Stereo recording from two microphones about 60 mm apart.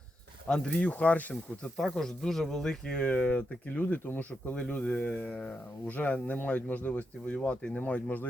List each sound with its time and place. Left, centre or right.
0.4 s speech: centre
0.9 s speech: left
1.8 s speech: centre; by 7.3 s left
7.3 s speech: centre